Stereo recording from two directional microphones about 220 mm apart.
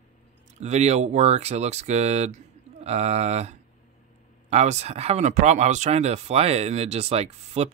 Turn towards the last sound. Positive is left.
turn(degrees=-30)  # may be behind; listen again after turning